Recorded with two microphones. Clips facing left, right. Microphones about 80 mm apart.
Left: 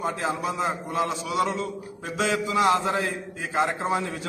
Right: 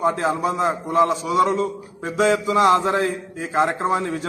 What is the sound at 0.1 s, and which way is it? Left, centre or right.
A man's voice, right.